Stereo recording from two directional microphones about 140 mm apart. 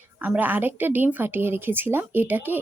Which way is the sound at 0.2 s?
15° right (ahead or behind).